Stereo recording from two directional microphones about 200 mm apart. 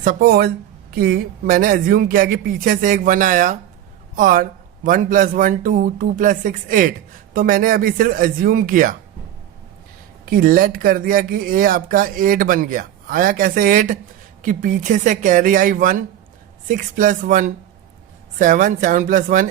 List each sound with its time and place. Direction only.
0.0 s a man's voice: 45° right (ahead or behind)
10.2 s a man's voice: 45° right (ahead or behind)